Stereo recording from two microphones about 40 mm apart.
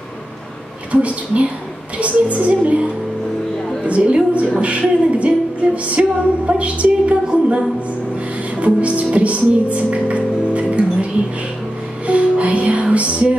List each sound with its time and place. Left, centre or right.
1.0 s speech: right
3.8 s speech: right
7.2 s music: right
12.1 s music: right